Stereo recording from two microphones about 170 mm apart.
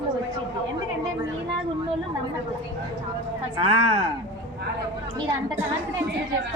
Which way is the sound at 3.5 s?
35° right (ahead or behind).